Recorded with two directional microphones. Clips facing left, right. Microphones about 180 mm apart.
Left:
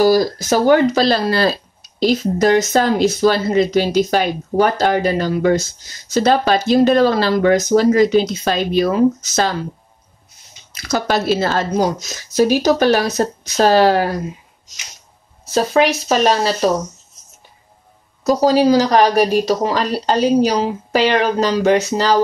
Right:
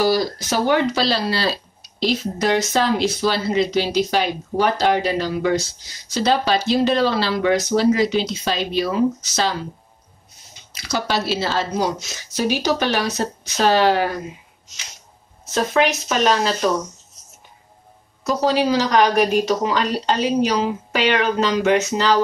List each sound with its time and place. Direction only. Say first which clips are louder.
0.0 s speech: left 5 dB; 45° left (ahead or behind)
10.7 s speech: left 5 dB; 45° left (ahead or behind)
15.4 s speech: left 4 dB; 35° left (ahead or behind)
18.2 s speech: left 6 dB; 40° left (ahead or behind)